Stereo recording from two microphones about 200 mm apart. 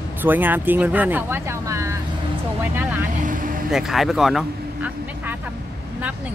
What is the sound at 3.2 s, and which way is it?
Vehicle, 40° right (ahead or behind).